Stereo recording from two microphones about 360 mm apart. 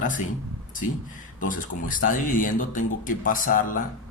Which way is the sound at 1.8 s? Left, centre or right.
Left.